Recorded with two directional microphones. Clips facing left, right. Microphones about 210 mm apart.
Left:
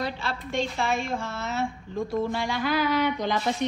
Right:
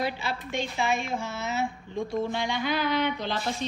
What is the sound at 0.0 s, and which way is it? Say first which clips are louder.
A woman's voice: even; 5° right (ahead or behind).